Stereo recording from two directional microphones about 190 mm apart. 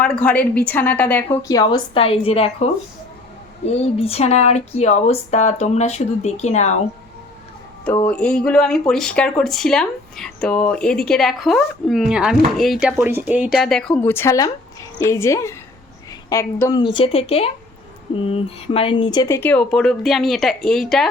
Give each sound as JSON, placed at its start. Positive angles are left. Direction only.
{"t": 0.0, "sound": "a woman's voice", "side_deg": 5}
{"t": 3.7, "sound": "speech", "side_deg": 30}
{"t": 8.0, "sound": "a woman's voice", "side_deg": 5}
{"t": 16.8, "sound": "speech", "side_deg": 30}